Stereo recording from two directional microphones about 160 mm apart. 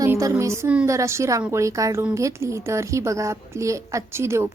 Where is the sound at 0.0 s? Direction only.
20° right (ahead or behind).